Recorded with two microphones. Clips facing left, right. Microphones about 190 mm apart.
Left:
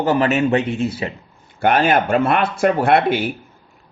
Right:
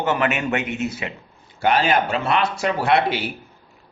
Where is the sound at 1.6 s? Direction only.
55° left (ahead or behind).